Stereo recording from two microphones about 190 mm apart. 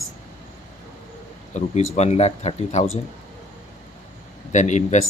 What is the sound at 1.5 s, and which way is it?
Speech, 40° left (ahead or behind).